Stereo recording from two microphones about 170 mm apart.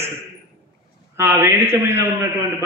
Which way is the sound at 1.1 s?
15° right (ahead or behind).